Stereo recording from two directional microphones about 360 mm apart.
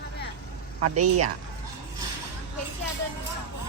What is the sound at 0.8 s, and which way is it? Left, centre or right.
Speech, right.